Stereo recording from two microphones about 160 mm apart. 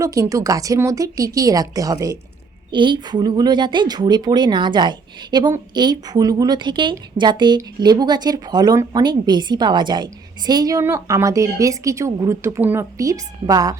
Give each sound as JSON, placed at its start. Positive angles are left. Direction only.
{"t": 0.0, "sound": "speech", "side_deg": -20}